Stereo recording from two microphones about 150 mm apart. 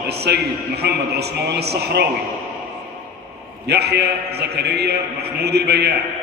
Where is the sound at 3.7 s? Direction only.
90° right.